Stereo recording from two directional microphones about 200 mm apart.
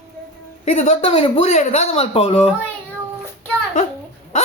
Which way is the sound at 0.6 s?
35° left (ahead or behind).